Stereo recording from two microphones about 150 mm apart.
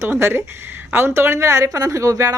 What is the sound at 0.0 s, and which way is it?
A woman's voice, 15° right (ahead or behind).